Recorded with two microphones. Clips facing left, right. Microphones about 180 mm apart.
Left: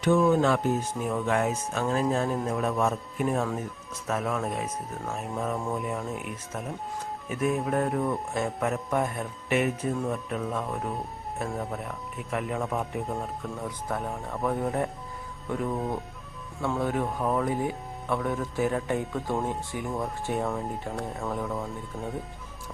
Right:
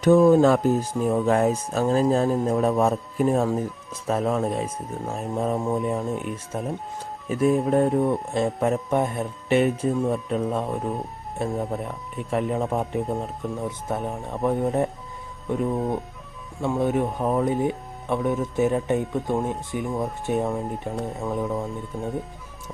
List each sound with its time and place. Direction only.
0.0 s speech: 35° right (ahead or behind); by 22.1 s 10° right (ahead or behind)